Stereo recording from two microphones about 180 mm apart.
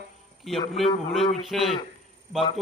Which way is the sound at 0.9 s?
35° left (ahead or behind).